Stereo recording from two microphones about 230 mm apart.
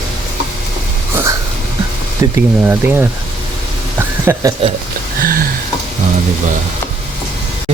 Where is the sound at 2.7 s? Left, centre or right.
Centre.